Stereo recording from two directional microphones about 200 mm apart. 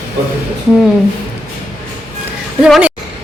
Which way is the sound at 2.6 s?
Centre (ahead or behind).